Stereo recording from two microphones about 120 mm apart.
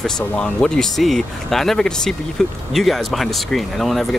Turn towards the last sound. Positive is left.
turn(degrees=0)  # may be behind; listen again after turning